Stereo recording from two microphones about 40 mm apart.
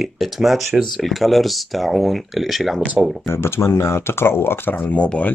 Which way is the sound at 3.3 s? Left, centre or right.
Left.